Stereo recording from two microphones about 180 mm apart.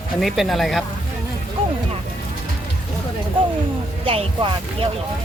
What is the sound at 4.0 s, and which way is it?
Speech, 30° right (ahead or behind).